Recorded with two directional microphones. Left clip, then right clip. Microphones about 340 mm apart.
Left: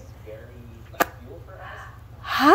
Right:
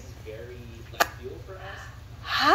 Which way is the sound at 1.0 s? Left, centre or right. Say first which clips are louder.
Left 1 dB; left.